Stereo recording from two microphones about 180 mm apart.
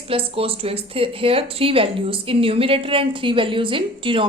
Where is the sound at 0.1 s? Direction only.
30° right (ahead or behind).